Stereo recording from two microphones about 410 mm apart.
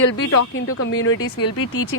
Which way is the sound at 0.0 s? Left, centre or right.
Left.